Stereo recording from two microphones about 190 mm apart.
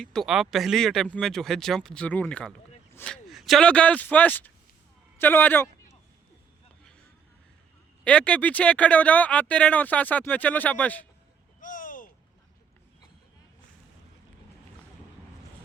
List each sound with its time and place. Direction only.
0.0 s speech: centre (ahead or behind)
8.0 s speech: 5° left (ahead or behind)
11.6 s a sound: 45° left (ahead or behind)